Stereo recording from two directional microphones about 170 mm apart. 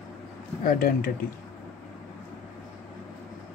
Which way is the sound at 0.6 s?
55° left (ahead or behind).